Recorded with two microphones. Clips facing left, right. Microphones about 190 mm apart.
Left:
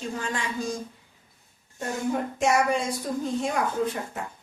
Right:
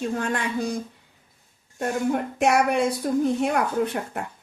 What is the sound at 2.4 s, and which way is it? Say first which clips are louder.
A woman's voice: right 3 dB; 65° right (ahead or behind).